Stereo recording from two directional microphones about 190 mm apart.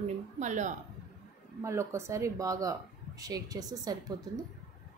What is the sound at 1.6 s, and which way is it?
Speech, 15° right (ahead or behind).